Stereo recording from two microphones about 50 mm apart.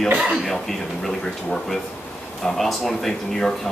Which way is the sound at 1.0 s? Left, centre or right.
Centre.